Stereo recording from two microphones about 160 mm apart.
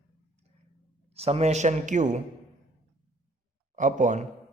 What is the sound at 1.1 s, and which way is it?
Speech, 40° right (ahead or behind).